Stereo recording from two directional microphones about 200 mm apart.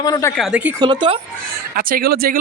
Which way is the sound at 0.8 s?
25° right (ahead or behind).